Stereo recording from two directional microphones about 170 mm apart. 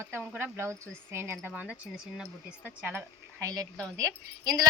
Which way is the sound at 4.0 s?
20° right (ahead or behind).